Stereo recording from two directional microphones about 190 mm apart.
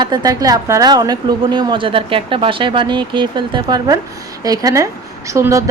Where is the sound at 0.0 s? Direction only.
20° right (ahead or behind).